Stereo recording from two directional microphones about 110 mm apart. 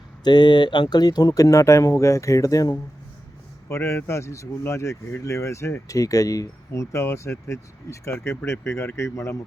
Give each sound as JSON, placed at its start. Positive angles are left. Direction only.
{"t": 0.3, "sound": "speech", "side_deg": 40}